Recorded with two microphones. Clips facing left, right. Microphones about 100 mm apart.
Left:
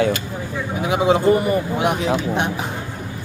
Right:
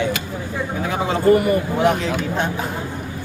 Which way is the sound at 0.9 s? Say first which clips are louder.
Left 1 dB; 15° left (ahead or behind).